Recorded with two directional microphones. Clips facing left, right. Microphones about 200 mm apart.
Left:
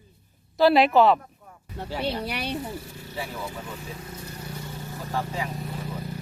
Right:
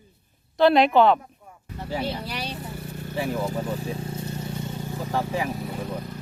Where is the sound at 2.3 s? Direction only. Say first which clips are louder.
Left 2 dB; 60° left (ahead or behind).